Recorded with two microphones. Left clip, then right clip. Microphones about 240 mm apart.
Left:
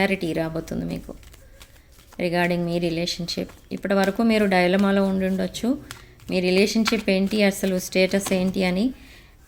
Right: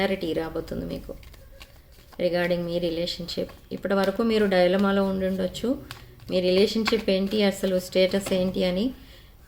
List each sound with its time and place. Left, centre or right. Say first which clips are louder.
0.0 s speech: left 3 dB; left
2.1 s speech: left 1 dB; left